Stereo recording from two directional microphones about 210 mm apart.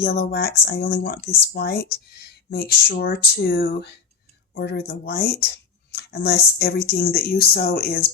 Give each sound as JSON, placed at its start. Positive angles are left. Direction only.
{"t": 0.0, "sound": "speech", "side_deg": 50}
{"t": 5.9, "sound": "a sound", "side_deg": 50}
{"t": 6.6, "sound": "speech", "side_deg": 50}